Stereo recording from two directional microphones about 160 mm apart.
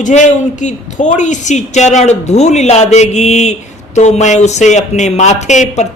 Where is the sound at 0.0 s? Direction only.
50° left (ahead or behind).